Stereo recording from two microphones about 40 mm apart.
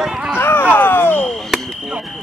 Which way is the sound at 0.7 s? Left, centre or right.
Left.